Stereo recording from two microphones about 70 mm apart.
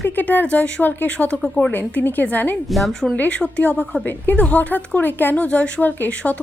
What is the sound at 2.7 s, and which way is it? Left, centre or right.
Speech, centre.